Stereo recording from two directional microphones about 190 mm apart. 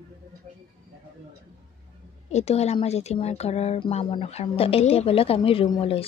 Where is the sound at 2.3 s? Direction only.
35° left (ahead or behind).